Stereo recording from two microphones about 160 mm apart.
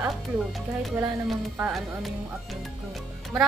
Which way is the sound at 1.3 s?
Centre (ahead or behind).